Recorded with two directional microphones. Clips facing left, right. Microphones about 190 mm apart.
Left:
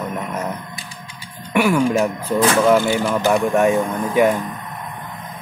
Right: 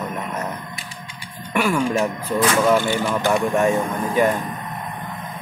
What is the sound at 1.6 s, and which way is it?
Speech, 10° left (ahead or behind).